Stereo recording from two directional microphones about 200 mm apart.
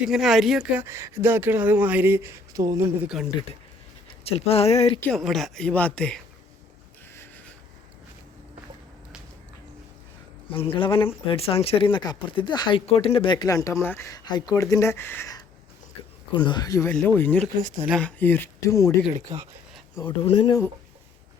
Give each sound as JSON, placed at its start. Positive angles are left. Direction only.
{"t": 0.0, "sound": "speech", "side_deg": 0}
{"t": 4.2, "sound": "speech", "side_deg": 30}
{"t": 4.9, "sound": "speech", "side_deg": 5}
{"t": 7.1, "sound": "a sound", "side_deg": 10}
{"t": 10.5, "sound": "speech", "side_deg": 25}
{"t": 17.4, "sound": "speech", "side_deg": -40}
{"t": 17.8, "sound": "speech", "side_deg": 5}
{"t": 19.3, "sound": "speech", "side_deg": -15}
{"t": 20.0, "sound": "speech", "side_deg": 25}